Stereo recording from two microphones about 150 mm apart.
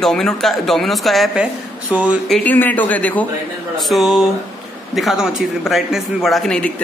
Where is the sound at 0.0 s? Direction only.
5° left (ahead or behind).